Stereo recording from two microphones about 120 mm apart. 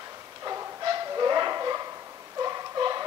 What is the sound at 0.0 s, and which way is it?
Bow-wow, 30° right (ahead or behind).